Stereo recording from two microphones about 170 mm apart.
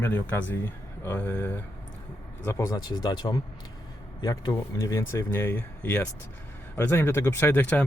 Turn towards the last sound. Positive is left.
turn(degrees=10)  # may be behind; listen again after turning